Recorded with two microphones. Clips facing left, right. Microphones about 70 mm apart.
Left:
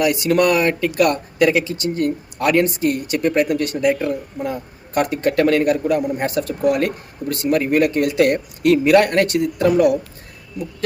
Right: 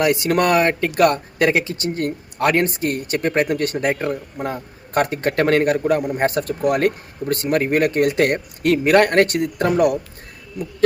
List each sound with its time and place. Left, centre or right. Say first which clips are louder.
0.0 s speech: left 1 dB; right